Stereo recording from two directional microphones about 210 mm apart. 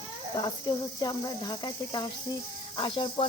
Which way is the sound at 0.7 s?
20° left (ahead or behind).